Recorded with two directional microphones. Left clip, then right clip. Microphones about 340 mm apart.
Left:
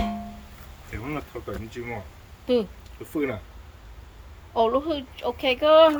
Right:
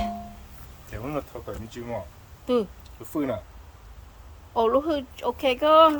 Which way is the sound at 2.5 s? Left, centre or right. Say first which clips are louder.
Left 1 dB; centre.